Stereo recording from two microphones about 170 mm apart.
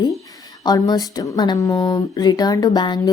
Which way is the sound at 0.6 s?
20° left (ahead or behind).